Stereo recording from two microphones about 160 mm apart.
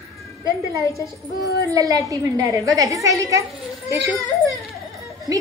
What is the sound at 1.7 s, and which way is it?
A woman's voice, 20° right (ahead or behind).